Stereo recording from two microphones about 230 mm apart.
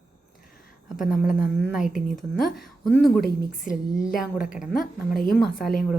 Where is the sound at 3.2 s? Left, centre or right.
Left.